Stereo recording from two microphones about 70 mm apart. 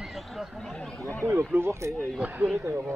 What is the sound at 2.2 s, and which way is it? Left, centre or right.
Speech, right.